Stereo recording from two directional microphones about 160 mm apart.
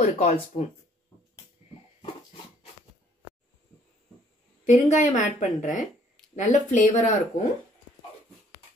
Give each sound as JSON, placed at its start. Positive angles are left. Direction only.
{"t": 0.0, "sound": "a woman's voice", "side_deg": 45}
{"t": 4.6, "sound": "a woman's voice", "side_deg": 50}